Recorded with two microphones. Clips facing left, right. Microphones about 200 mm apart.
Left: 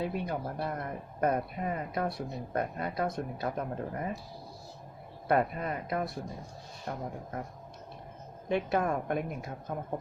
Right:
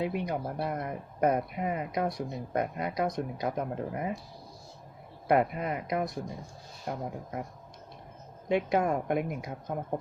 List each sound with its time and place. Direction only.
0.0 s speech: 15° right (ahead or behind)
5.3 s speech: 20° right (ahead or behind)
8.4 s speech: 15° right (ahead or behind)